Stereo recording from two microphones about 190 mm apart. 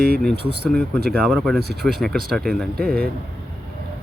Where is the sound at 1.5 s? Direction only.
55° right (ahead or behind).